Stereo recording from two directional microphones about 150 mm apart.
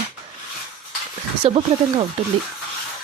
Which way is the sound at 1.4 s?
40° right (ahead or behind).